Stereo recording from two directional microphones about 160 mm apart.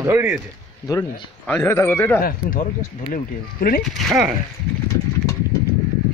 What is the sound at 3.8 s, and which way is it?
Speech, centre (ahead or behind).